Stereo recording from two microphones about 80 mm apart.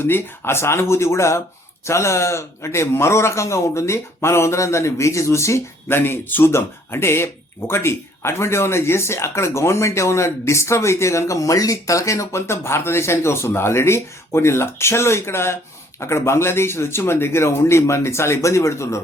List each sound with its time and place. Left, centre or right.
0.0 s speech: left